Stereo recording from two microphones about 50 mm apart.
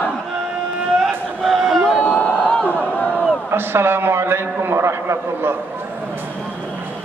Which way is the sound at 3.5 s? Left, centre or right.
Right.